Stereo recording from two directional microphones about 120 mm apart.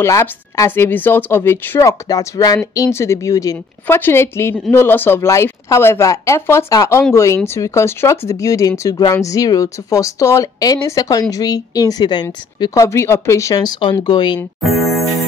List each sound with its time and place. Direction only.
0.0 s speech: 25° left (ahead or behind)
3.8 s speech: 20° left (ahead or behind); by 12.8 s 35° left (ahead or behind)
12.8 s speech: 25° left (ahead or behind)
14.6 s speech: centre (ahead or behind)